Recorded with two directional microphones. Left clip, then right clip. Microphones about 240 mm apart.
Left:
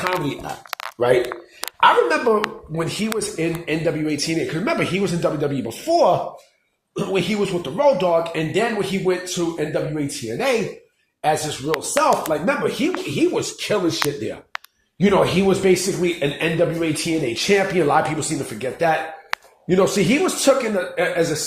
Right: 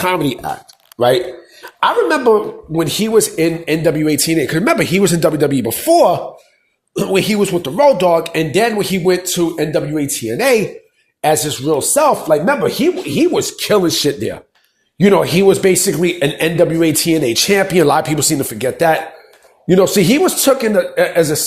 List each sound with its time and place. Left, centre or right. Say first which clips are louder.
0.9 s speech: right 5 dB; right